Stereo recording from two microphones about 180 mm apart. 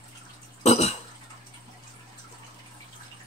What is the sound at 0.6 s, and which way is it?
Cough, 35° left (ahead or behind).